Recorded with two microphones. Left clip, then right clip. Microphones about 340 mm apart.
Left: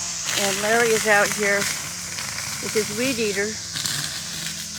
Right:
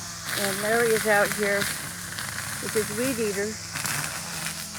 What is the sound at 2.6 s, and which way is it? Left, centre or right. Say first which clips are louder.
Speech: left 3 dB; centre.